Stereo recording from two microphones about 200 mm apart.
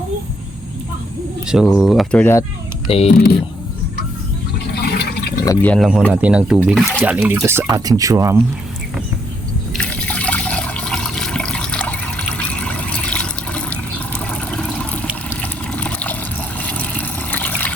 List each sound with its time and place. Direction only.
1.5 s speech: centre (ahead or behind)
2.8 s speech: 30° left (ahead or behind)
3.1 s speech: 50° left (ahead or behind)
4.7 s toilet flush: 55° left (ahead or behind)
5.5 s speech: 5° left (ahead or behind); by 8.4 s 15° right (ahead or behind)
9.7 s water: 5° left (ahead or behind)
16.6 s a sound: 5° left (ahead or behind)